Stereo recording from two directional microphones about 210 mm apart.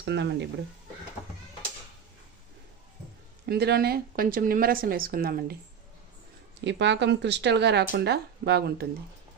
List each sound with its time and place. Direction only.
0.0 s speech: 55° right (ahead or behind)
3.4 s speech: 50° right (ahead or behind)
6.6 s speech: 55° right (ahead or behind)